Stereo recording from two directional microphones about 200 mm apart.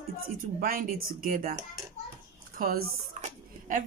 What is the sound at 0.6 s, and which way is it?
Speech, 45° right (ahead or behind).